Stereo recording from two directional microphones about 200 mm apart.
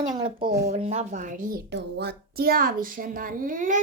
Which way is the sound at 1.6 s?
55° right (ahead or behind).